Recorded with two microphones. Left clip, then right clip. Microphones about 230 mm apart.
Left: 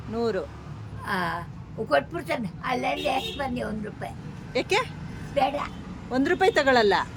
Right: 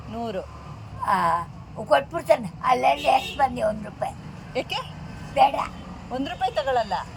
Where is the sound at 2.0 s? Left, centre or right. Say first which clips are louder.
Right 2 dB; left.